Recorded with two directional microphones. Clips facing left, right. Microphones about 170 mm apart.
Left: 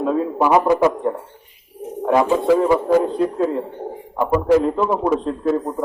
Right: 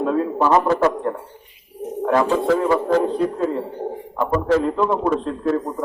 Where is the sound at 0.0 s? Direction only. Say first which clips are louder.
Left 1 dB; 5° left (ahead or behind).